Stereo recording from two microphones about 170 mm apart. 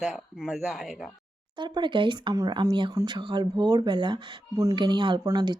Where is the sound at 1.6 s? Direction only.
25° right (ahead or behind).